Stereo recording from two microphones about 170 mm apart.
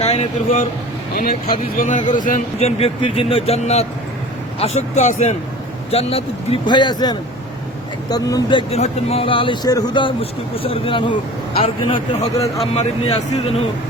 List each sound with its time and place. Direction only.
0.0 s speech: 40° left (ahead or behind)
1.1 s speech: 55° left (ahead or behind); by 13.6 s 40° left (ahead or behind)